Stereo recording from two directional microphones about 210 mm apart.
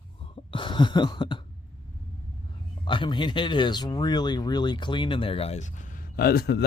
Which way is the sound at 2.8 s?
25° left (ahead or behind).